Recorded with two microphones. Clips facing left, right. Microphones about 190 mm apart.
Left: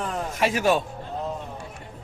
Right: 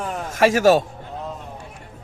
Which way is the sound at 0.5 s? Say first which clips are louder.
Right 6 dB; 40° right (ahead or behind).